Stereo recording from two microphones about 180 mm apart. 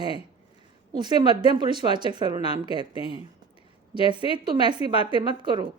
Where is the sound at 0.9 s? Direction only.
25° right (ahead or behind).